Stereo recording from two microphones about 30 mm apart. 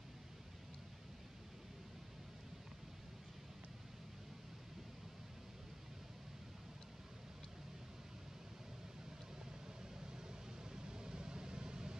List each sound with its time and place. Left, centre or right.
10.1 s vehicle: right